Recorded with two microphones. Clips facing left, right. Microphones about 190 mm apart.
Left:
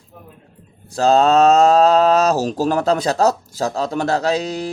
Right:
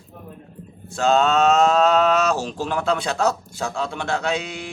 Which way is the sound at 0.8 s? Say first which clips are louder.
Left 4 dB; 35° left (ahead or behind).